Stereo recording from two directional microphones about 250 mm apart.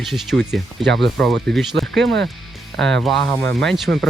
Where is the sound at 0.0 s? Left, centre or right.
Centre.